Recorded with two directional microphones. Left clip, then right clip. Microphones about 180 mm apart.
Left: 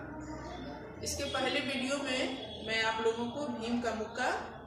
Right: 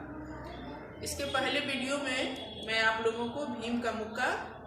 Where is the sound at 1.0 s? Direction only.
10° right (ahead or behind).